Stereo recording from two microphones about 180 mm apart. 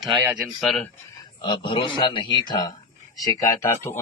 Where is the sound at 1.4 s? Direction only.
25° left (ahead or behind).